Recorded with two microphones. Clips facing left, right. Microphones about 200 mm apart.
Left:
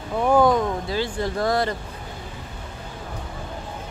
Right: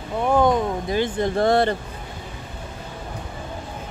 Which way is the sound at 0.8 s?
20° right (ahead or behind).